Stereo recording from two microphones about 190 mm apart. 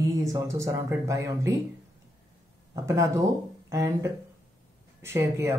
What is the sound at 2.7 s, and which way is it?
Speech, 15° right (ahead or behind).